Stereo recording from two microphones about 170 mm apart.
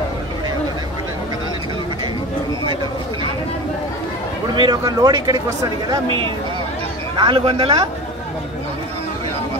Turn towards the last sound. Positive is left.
turn(degrees=-30)  # may be behind; listen again after turning